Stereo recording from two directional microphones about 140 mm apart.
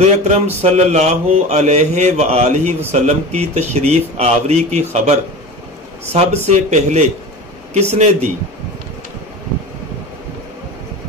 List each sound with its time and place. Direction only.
0.0 s speech: 50° right (ahead or behind)
6.1 s speech: 55° right (ahead or behind)